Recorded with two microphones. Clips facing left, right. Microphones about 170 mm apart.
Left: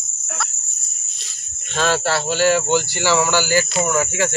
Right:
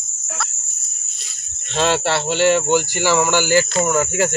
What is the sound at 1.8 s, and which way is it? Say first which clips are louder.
Speech: right 1 dB; 25° right (ahead or behind).